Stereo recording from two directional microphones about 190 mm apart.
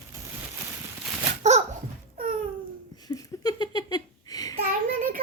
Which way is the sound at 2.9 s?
20° left (ahead or behind).